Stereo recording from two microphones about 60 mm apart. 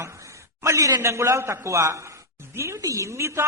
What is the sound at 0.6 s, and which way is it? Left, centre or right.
A man's voice, right.